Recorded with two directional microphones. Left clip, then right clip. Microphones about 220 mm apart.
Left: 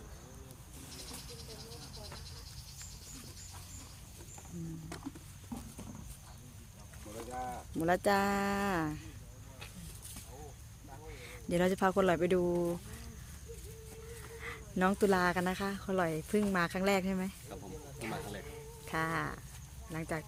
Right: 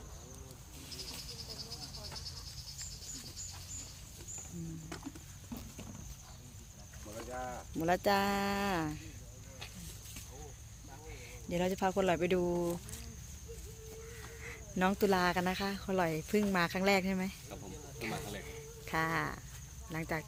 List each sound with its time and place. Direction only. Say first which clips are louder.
7.3 s a sound: left 2 dB; 20° left (ahead or behind)
7.8 s speech: left 1 dB; 5° left (ahead or behind)
11.2 s speech: left 3 dB; 15° left (ahead or behind)
14.4 s speech: left 1 dB; 5° left (ahead or behind)